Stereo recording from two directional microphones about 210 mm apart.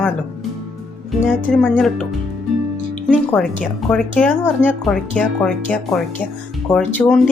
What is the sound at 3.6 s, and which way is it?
Speech, 5° left (ahead or behind).